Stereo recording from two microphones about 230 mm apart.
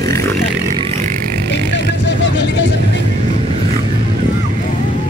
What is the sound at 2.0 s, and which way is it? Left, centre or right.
Vehicle, left.